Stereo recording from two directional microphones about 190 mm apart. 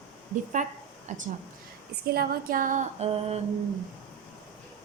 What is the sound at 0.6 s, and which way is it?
Speech, 40° right (ahead or behind).